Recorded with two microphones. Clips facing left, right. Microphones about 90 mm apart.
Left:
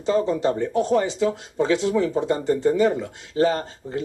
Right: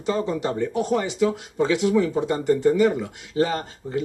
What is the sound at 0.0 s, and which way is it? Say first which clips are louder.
Speech: left 3 dB; 25° left (ahead or behind).